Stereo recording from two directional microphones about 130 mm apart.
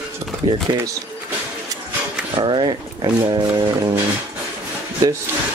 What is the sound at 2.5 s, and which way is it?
Speech, 35° right (ahead or behind).